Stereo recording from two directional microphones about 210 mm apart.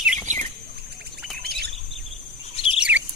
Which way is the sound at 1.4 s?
50° right (ahead or behind).